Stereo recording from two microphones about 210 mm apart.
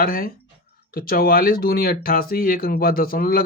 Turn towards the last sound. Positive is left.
turn(degrees=45)  # may be behind; listen again after turning